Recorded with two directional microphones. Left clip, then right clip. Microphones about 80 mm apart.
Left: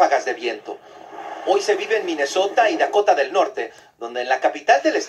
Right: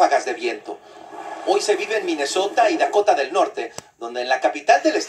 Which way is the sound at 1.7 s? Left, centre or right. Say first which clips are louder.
Left 1 dB; centre.